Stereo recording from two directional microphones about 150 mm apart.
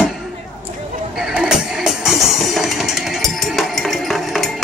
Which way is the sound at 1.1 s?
5° right (ahead or behind).